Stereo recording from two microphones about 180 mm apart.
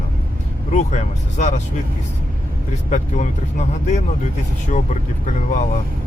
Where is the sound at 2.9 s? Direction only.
40° left (ahead or behind).